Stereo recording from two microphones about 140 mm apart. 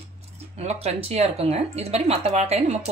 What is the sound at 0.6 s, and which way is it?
Speech, 50° right (ahead or behind).